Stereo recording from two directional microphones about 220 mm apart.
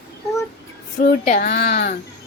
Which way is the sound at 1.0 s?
40° left (ahead or behind).